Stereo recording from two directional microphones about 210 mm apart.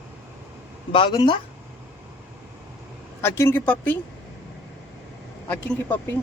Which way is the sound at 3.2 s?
10° left (ahead or behind).